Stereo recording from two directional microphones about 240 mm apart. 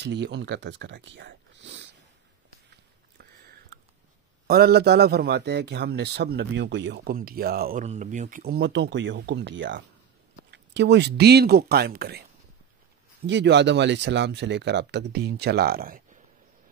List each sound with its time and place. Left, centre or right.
0.0 s speech: right
4.5 s a man's voice: right
13.3 s a man's voice: right